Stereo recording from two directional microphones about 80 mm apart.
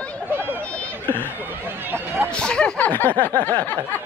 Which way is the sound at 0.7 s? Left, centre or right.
Left.